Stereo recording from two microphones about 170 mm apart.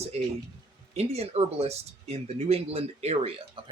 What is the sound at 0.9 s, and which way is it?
Speech, 35° right (ahead or behind).